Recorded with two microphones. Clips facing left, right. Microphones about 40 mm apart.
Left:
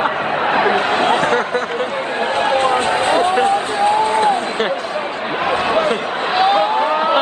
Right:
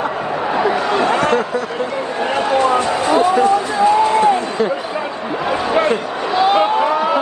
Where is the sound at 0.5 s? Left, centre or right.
Left.